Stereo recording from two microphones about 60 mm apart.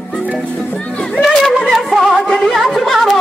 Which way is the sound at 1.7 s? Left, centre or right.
Centre.